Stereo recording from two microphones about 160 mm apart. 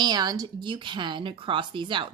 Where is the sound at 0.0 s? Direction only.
25° right (ahead or behind).